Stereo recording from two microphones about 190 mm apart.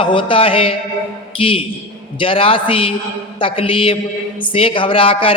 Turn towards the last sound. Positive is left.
turn(degrees=30)  # may be behind; listen again after turning